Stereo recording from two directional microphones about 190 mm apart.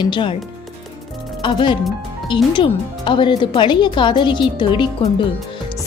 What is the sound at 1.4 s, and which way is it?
Speech, 25° left (ahead or behind).